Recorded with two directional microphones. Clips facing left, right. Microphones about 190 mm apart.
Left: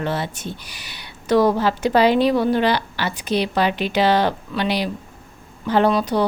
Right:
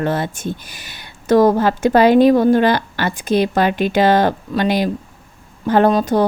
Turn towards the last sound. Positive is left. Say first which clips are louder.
# right 4 dB
turn(degrees=-45)  # may be behind; listen again after turning